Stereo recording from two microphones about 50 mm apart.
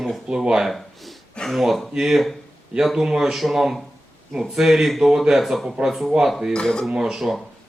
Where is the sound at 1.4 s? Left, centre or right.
Centre.